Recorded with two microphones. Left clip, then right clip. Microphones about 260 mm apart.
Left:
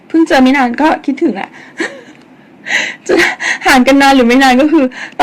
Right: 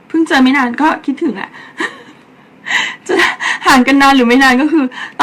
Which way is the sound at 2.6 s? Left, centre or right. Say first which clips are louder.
Left 2 dB; right.